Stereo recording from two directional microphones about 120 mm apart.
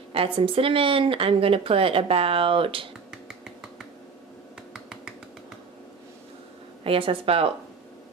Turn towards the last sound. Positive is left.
turn(degrees=-55)  # may be behind; listen again after turning